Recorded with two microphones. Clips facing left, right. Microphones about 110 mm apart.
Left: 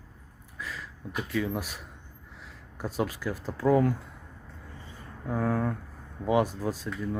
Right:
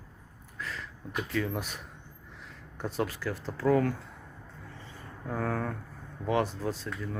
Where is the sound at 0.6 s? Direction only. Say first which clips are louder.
Even; 5° left (ahead or behind).